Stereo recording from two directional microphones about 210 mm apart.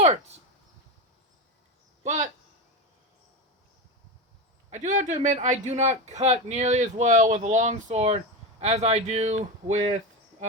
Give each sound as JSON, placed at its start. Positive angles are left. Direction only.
{"t": 0.0, "sound": "speech", "side_deg": -35}
{"t": 2.0, "sound": "speech", "side_deg": -35}
{"t": 4.7, "sound": "speech", "side_deg": -35}